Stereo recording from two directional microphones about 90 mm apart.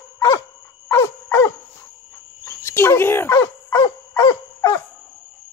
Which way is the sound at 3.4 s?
50° left (ahead or behind).